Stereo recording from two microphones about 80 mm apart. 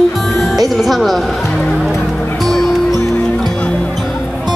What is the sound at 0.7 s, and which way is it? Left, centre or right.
Speech, centre.